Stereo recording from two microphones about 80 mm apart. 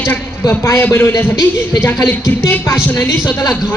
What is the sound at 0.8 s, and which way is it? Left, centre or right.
Speech, left.